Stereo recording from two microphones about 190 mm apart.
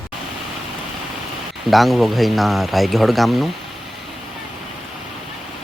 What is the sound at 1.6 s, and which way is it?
Speech, centre (ahead or behind).